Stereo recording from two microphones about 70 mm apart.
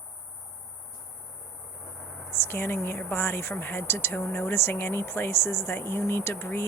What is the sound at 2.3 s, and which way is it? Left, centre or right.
Speech, left.